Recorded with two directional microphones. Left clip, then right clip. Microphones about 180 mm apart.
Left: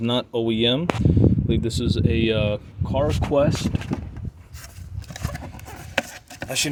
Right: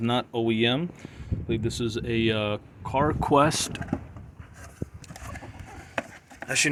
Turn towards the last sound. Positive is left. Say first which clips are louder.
# right 1 dB
turn(degrees=35)  # may be behind; listen again after turning